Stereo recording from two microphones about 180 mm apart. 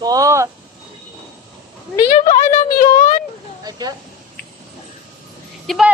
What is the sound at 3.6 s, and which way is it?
Speech, 20° right (ahead or behind).